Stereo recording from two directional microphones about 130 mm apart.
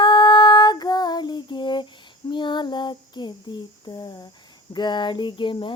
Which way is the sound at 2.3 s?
35° left (ahead or behind).